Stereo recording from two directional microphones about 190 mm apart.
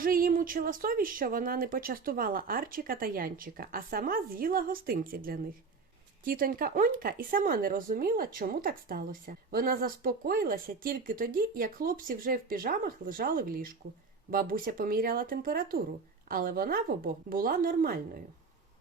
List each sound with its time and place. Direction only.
0.0 s speech: 50° right (ahead or behind)